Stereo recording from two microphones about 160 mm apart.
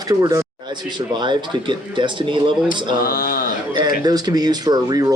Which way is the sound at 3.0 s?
65° left (ahead or behind).